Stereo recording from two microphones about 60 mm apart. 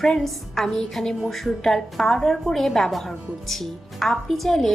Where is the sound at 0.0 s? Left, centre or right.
Centre.